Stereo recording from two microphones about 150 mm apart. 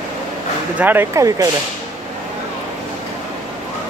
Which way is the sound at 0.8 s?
15° right (ahead or behind).